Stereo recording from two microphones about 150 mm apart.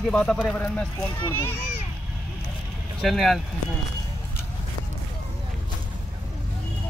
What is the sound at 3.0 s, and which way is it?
Speech, centre (ahead or behind).